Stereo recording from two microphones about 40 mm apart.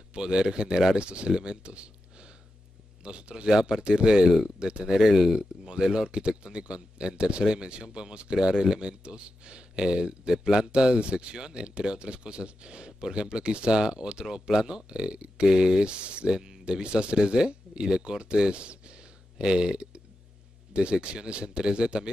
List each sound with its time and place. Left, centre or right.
0.1 s speech: right
15.4 s speech: centre